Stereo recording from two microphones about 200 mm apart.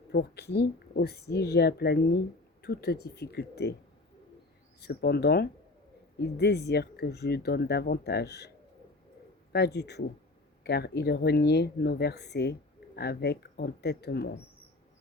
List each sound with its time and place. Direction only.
0.1 s speech: 55° left (ahead or behind)
4.8 s speech: 55° left (ahead or behind)
9.5 s speech: 55° left (ahead or behind)